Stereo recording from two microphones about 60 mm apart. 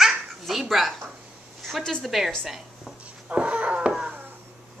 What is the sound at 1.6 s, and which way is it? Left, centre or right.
Speech, centre.